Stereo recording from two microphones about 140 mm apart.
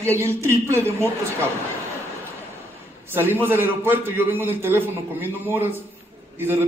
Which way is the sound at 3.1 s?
15° right (ahead or behind).